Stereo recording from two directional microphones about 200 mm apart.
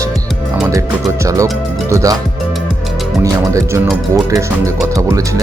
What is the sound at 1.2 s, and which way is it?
Speech, 15° right (ahead or behind).